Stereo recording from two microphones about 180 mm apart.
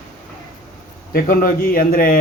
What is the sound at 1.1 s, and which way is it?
A man's voice, 55° left (ahead or behind).